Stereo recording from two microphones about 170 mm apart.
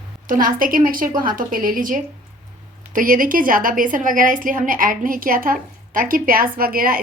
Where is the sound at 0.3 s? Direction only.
55° right (ahead or behind).